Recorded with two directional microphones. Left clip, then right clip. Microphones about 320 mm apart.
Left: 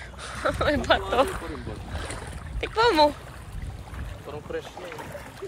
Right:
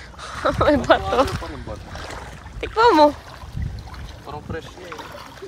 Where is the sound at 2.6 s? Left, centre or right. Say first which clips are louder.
Right 6 dB; centre.